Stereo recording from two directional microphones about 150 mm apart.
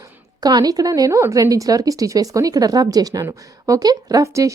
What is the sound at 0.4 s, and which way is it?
Speech, 25° right (ahead or behind).